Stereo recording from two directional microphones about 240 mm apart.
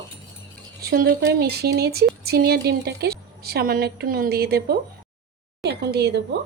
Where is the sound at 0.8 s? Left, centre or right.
Right.